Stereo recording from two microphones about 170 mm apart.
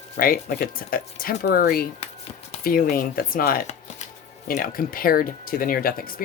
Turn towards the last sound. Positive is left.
turn(degrees=60)  # may be behind; listen again after turning